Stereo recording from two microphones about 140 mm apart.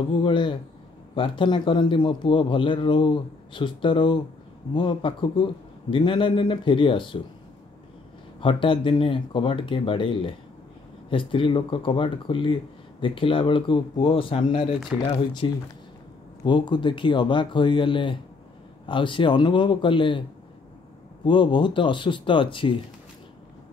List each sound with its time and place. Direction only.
0.2 s a man's voice: 35° left (ahead or behind)
8.4 s a man's voice: 40° left (ahead or behind)